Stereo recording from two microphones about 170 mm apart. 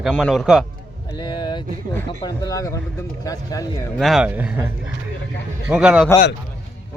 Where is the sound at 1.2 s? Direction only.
25° left (ahead or behind).